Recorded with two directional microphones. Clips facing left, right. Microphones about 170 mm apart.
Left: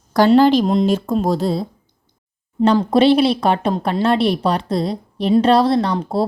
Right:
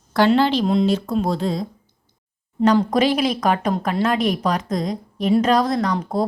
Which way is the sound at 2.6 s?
25° left (ahead or behind).